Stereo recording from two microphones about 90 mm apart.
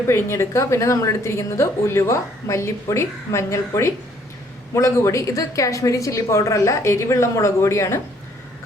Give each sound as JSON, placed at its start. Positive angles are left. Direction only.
{"t": 0.1, "sound": "a woman's voice", "side_deg": 30}